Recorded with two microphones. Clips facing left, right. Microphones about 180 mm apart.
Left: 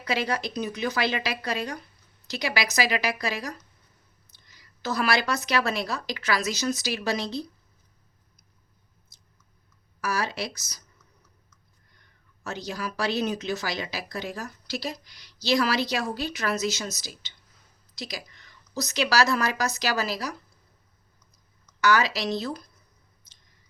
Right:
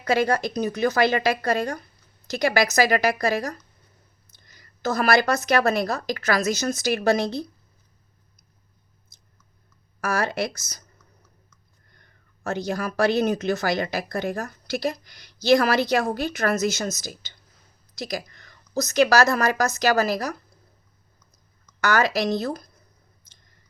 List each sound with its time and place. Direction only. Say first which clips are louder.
0.0 s a woman's voice: right 6 dB; 45° right (ahead or behind)
10.0 s a woman's voice: right 4 dB; 50° right (ahead or behind)
11.9 s a woman's voice: right 4 dB; 50° right (ahead or behind)
21.8 s a woman's voice: right 2 dB; 50° right (ahead or behind)